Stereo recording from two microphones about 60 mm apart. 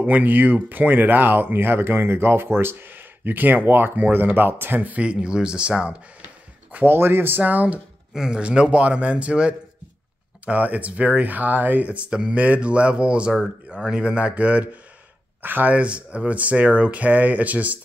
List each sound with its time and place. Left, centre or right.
0.0 s speech: right
6.7 s speech: right
8.1 s a man's voice: centre